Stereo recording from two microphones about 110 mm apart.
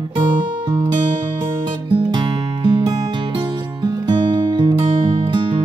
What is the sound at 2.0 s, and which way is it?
Music, 45° right (ahead or behind).